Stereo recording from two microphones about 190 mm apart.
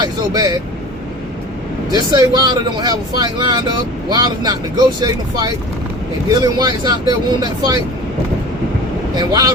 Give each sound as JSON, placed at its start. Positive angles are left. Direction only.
{"t": 0.0, "sound": "speech", "side_deg": -20}
{"t": 1.9, "sound": "speech", "side_deg": -20}
{"t": 9.1, "sound": "speech", "side_deg": -20}